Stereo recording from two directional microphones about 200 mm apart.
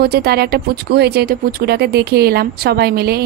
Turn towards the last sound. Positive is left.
turn(degrees=-50)  # may be behind; listen again after turning